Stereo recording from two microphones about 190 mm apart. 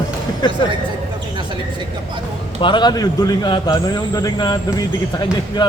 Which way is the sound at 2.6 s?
25° left (ahead or behind).